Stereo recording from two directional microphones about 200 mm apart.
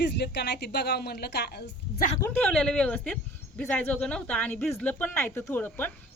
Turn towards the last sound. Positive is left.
turn(degrees=10)  # may be behind; listen again after turning